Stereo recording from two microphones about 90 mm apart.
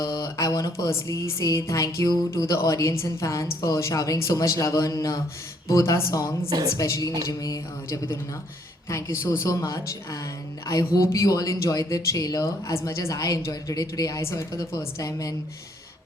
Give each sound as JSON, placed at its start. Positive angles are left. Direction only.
{"t": 0.0, "sound": "music", "side_deg": 35}
{"t": 6.5, "sound": "a woman's voice", "side_deg": -45}
{"t": 6.7, "sound": "music", "side_deg": 35}